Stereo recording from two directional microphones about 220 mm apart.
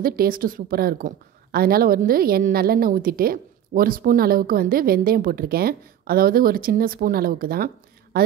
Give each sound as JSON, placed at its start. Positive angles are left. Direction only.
{"t": 0.0, "sound": "a woman's voice", "side_deg": -45}